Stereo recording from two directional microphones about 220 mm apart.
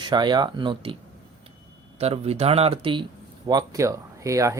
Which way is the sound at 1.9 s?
25° right (ahead or behind).